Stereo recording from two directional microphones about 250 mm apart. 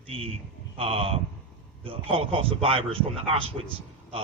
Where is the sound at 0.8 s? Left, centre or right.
Right.